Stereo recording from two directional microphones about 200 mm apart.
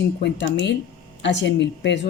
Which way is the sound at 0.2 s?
60° left (ahead or behind).